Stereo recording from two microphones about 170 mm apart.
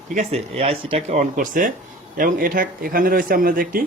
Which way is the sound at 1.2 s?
50° right (ahead or behind).